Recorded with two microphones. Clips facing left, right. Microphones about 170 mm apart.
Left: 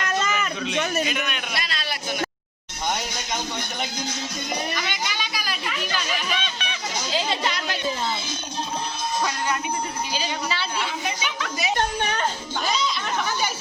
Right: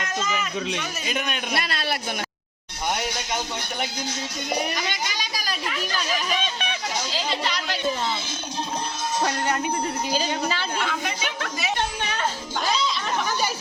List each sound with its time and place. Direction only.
0.1 s a sound: 60° left (ahead or behind)
1.0 s a man's voice: 40° right (ahead or behind); by 2.0 s 55° right (ahead or behind)
4.7 s speech: 40° right (ahead or behind)
10.1 s a woman's voice: 40° right (ahead or behind)